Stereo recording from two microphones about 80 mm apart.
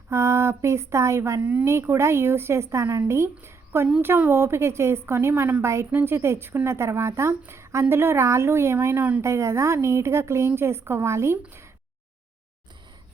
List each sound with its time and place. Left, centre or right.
0.1 s a woman's voice: right
1.4 s speech: centre
1.6 s a woman's voice: right
9.0 s speech: centre
9.2 s a woman's voice: right